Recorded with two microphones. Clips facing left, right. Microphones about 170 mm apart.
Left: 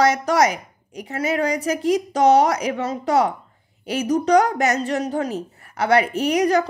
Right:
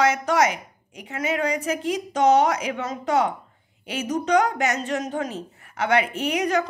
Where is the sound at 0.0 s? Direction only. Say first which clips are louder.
Left 3 dB; 40° left (ahead or behind).